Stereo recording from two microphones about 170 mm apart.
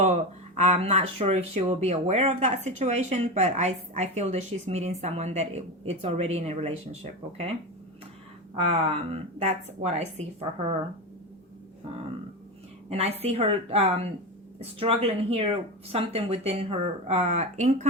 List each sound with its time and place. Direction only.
0.0 s speech: 40° right (ahead or behind)
8.7 s speech: 35° right (ahead or behind)
12.9 s speech: 35° right (ahead or behind)